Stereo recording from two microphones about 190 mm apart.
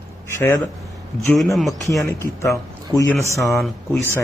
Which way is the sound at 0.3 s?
10° left (ahead or behind).